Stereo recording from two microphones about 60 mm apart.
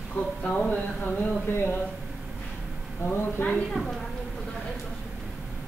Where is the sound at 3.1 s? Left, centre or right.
Left.